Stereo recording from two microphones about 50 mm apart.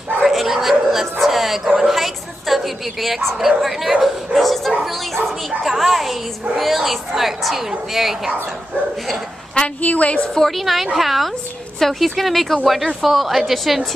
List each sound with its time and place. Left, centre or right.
0.2 s dog: centre
1.2 s music: centre
1.8 s a woman's voice: centre
9.8 s a woman's voice: left
10.3 s a woman's voice: centre